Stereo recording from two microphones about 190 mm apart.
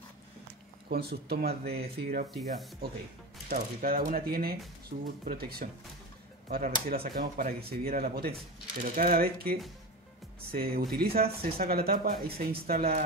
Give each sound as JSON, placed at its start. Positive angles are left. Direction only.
{"t": 0.8, "sound": "speech", "side_deg": -55}
{"t": 3.4, "sound": "speech", "side_deg": -50}